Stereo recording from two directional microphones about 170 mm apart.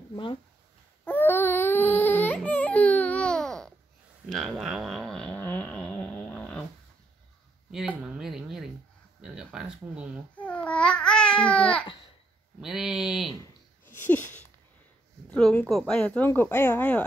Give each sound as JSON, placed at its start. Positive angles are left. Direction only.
{"t": 0.1, "sound": "speech", "side_deg": 30}
{"t": 1.0, "sound": "baby cry", "side_deg": 10}
{"t": 4.3, "sound": "a sound", "side_deg": 0}
{"t": 7.7, "sound": "speech", "side_deg": -5}
{"t": 10.3, "sound": "babbling", "side_deg": 10}
{"t": 12.5, "sound": "speech", "side_deg": -5}
{"t": 13.4, "sound": "a sound", "side_deg": 10}
{"t": 15.3, "sound": "speech", "side_deg": 5}